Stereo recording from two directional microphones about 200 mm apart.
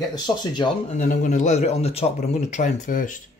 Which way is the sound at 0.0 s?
20° left (ahead or behind).